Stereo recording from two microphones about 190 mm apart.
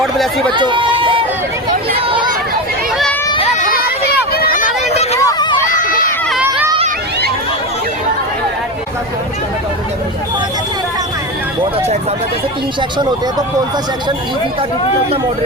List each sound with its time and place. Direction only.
0.0 s run: centre (ahead or behind)
0.5 s run: 25° right (ahead or behind)
2.0 s chatter: 25° right (ahead or behind)
3.6 s a sound: 50° left (ahead or behind)